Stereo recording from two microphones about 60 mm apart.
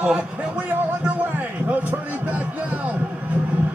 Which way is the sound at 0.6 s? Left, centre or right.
Right.